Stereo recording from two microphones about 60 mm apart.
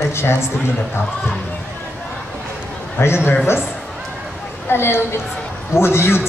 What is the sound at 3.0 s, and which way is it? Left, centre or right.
Speech, left.